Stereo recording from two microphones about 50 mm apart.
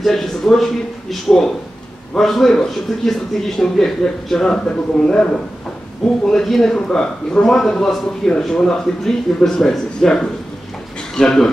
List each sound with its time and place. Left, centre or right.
0.0 s a man's voice: centre
2.1 s speech: centre